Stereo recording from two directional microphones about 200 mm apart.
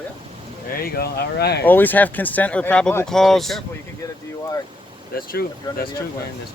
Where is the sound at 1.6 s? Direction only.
10° left (ahead or behind).